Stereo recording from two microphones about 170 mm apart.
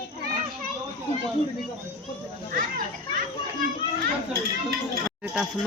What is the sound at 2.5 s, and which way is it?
Children playing, 55° right (ahead or behind).